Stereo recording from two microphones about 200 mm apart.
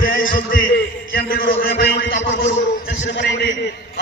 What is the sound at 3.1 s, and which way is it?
Speech, 60° left (ahead or behind).